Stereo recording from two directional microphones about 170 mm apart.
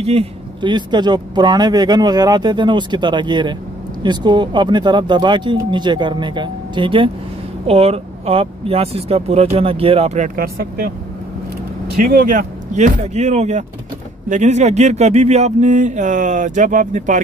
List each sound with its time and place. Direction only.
0.0 s speech: 35° right (ahead or behind)
10.3 s speech: 60° right (ahead or behind)
12.0 s speech: 60° right (ahead or behind)